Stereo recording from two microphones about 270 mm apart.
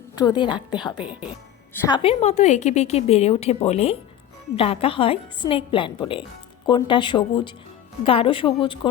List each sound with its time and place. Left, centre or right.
0.2 s speech: centre
0.9 s speech: centre
1.7 s a woman's voice: centre